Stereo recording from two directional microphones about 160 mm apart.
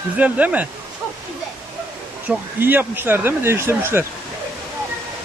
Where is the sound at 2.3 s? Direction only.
10° right (ahead or behind).